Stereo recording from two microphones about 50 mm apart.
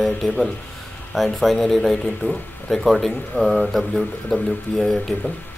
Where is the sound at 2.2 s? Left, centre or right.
Left.